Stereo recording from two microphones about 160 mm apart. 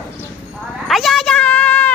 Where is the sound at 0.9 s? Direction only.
Centre (ahead or behind).